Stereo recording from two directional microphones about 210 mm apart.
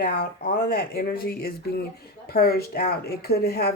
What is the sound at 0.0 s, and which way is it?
Speech, 45° left (ahead or behind).